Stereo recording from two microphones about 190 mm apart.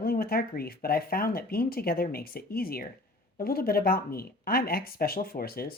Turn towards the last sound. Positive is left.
turn(degrees=50)  # may be behind; listen again after turning